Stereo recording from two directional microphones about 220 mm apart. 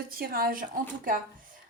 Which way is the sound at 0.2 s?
45° right (ahead or behind).